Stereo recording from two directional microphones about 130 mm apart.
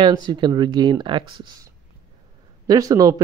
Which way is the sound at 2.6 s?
25° right (ahead or behind).